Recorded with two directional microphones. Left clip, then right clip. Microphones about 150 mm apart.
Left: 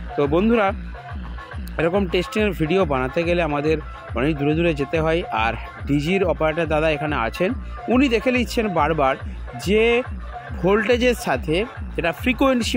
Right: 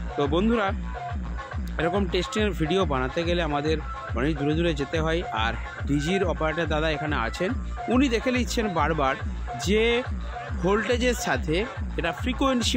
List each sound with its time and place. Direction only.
0.2 s speech: 30° left (ahead or behind)
1.8 s speech: 30° left (ahead or behind)